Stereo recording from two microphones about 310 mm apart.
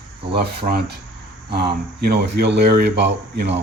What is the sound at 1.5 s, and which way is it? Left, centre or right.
Speech, right.